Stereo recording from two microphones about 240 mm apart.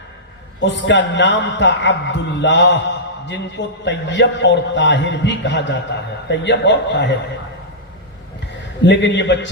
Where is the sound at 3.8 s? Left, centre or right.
Left.